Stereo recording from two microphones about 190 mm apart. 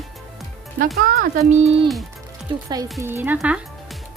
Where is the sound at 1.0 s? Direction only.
50° right (ahead or behind); by 1.9 s 30° right (ahead or behind).